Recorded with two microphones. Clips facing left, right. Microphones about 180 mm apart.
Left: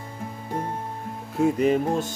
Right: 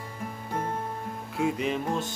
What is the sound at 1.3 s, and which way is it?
Music, 45° left (ahead or behind).